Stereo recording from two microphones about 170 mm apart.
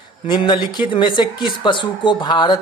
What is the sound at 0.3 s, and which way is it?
Speech, 25° left (ahead or behind).